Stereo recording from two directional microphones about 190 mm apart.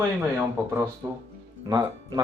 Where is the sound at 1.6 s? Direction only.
20° right (ahead or behind).